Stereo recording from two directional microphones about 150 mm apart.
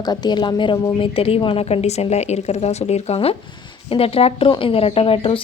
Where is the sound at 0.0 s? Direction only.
30° left (ahead or behind).